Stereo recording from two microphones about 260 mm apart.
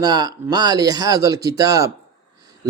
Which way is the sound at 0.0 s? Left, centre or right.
Centre.